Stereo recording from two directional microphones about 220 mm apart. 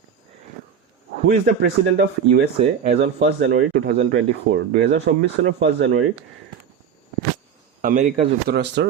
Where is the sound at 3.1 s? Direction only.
50° right (ahead or behind).